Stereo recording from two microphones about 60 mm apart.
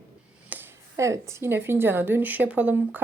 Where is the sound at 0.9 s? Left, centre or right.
Right.